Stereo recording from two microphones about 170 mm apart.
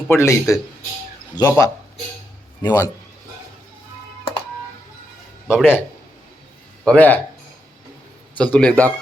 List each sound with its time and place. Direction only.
0.1 s speech: 15° left (ahead or behind)
5.5 s speech: 5° right (ahead or behind)
6.8 s speech: 10° left (ahead or behind)
8.4 s speech: 5° left (ahead or behind)